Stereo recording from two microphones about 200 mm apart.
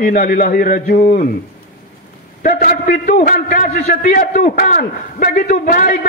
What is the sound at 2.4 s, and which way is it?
A man's voice, 45° left (ahead or behind).